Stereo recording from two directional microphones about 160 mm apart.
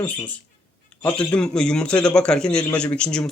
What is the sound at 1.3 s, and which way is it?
A man's voice, 5° left (ahead or behind).